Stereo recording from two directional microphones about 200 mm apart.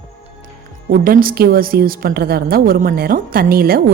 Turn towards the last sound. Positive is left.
turn(degrees=-50)  # may be behind; listen again after turning